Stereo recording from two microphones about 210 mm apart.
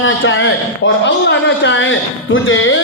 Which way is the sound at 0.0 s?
65° left (ahead or behind).